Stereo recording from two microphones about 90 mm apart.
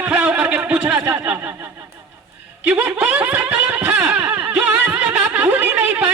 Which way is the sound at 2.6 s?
15° right (ahead or behind).